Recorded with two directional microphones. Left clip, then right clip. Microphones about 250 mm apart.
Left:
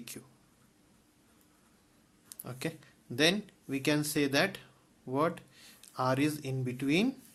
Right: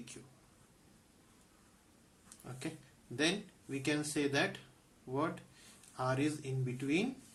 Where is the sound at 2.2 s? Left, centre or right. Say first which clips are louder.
Left 7 dB; left.